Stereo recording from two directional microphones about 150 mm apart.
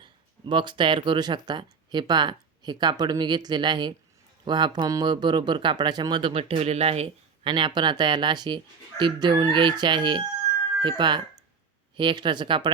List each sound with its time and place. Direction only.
0.0 s speech: 30° right (ahead or behind)